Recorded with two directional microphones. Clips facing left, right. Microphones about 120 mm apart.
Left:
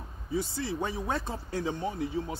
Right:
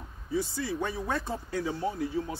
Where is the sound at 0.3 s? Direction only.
25° left (ahead or behind).